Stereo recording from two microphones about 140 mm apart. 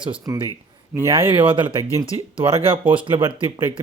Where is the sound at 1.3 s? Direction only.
35° right (ahead or behind).